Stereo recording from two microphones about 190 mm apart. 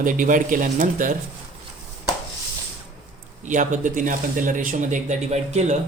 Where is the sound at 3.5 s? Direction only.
40° right (ahead or behind).